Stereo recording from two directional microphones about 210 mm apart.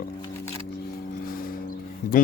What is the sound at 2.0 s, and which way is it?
Speech, 40° left (ahead or behind).